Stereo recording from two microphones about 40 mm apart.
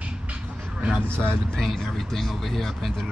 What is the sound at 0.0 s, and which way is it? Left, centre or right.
Vehicle, right.